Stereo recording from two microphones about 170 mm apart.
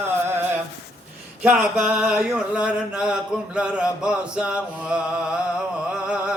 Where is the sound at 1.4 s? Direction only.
5° right (ahead or behind).